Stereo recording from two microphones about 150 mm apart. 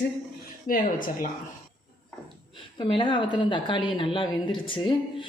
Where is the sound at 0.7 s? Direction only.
65° left (ahead or behind).